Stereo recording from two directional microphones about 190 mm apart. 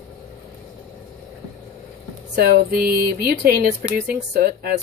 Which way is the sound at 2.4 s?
55° right (ahead or behind).